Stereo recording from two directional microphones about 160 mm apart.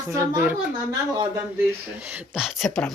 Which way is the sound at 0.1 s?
15° right (ahead or behind).